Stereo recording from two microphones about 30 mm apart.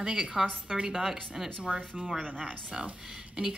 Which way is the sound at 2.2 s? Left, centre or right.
Right.